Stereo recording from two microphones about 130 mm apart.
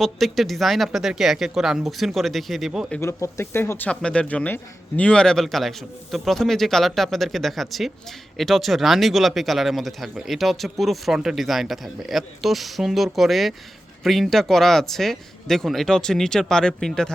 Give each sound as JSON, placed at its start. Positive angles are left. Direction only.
{"t": 0.0, "sound": "speech", "side_deg": 0}
{"t": 3.0, "sound": "speech", "side_deg": 20}